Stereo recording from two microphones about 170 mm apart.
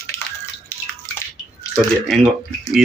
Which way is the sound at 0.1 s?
15° left (ahead or behind).